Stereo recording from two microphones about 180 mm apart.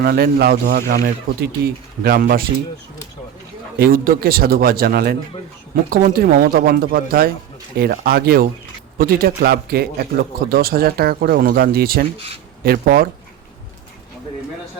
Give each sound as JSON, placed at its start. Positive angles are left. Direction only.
{"t": 0.0, "sound": "speech", "side_deg": -60}
{"t": 3.8, "sound": "speech", "side_deg": -55}
{"t": 12.1, "sound": "speech", "side_deg": -35}
{"t": 12.6, "sound": "speech", "side_deg": -60}